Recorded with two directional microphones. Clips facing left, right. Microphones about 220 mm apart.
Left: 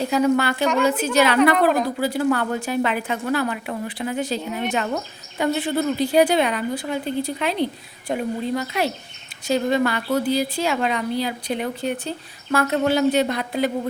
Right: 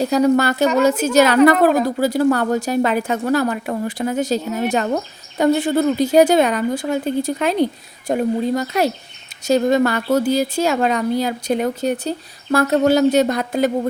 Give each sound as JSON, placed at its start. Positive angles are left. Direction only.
{"t": 0.0, "sound": "a woman's voice", "side_deg": -40}